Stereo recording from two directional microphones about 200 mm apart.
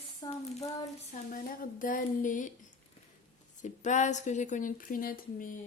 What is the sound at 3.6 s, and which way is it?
Speech, 40° left (ahead or behind).